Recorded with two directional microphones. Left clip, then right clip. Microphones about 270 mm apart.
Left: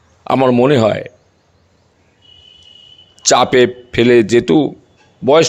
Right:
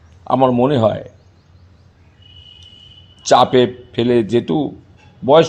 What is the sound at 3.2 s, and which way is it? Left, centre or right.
A man's voice, left.